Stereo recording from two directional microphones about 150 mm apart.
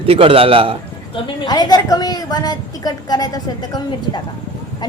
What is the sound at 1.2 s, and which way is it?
A woman's voice, 30° left (ahead or behind).